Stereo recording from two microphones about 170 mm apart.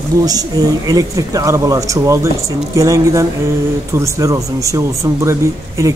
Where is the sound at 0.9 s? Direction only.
20° right (ahead or behind).